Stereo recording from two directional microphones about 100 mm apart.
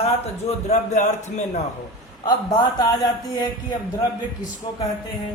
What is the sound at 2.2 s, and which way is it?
A man's voice, 40° left (ahead or behind).